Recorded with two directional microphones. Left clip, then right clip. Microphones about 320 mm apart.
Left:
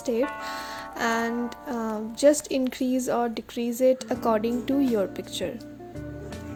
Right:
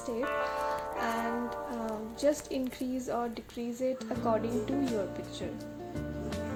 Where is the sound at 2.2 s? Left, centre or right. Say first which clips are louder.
Left 10 dB; left.